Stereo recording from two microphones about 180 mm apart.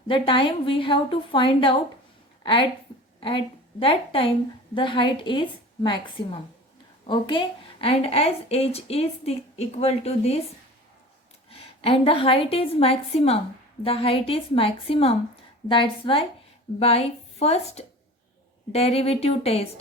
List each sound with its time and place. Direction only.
0.1 s a woman's voice: 30° left (ahead or behind)
11.5 s a woman's voice: 30° left (ahead or behind)